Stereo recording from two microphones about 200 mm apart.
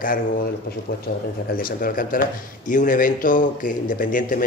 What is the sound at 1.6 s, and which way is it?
Speech, 45° left (ahead or behind).